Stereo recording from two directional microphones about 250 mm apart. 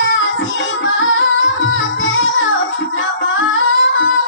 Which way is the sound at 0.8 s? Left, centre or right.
Left.